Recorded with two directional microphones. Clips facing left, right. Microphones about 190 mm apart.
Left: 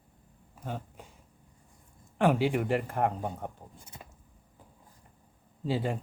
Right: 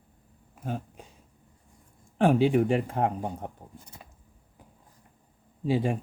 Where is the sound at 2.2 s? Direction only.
20° right (ahead or behind).